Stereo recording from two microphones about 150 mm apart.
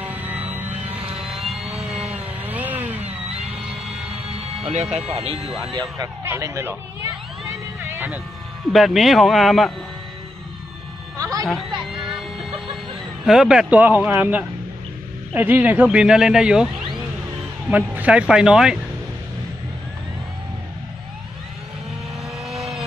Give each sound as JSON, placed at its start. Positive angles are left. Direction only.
{"t": 0.0, "sound": "music", "side_deg": -10}
{"t": 1.1, "sound": "vehicle", "side_deg": 0}
{"t": 2.4, "sound": "chainsaw", "side_deg": -10}
{"t": 4.6, "sound": "music", "side_deg": -45}
{"t": 5.1, "sound": "speech", "side_deg": -40}
{"t": 5.7, "sound": "speech", "side_deg": -30}
{"t": 6.2, "sound": "speech", "side_deg": -20}
{"t": 7.8, "sound": "vehicle", "side_deg": -15}
{"t": 8.7, "sound": "speech", "side_deg": 0}
{"t": 11.1, "sound": "music", "side_deg": -25}
{"t": 11.4, "sound": "music", "side_deg": 0}
{"t": 13.2, "sound": "speech", "side_deg": -5}
{"t": 22.5, "sound": "vehicle", "side_deg": 0}